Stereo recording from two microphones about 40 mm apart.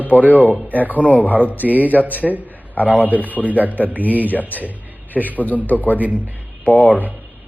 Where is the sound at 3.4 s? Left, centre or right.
Right.